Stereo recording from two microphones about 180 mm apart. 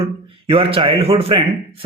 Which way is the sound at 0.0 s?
30° right (ahead or behind).